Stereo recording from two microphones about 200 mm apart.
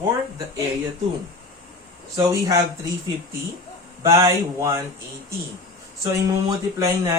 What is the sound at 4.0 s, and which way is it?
Speech, 15° right (ahead or behind).